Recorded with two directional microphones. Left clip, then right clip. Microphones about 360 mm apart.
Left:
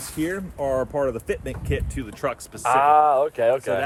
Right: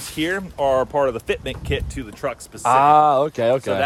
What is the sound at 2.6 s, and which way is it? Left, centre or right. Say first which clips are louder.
Speech: right 3 dB; centre.